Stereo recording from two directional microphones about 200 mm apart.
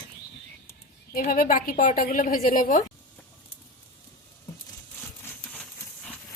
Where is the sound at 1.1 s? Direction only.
45° left (ahead or behind).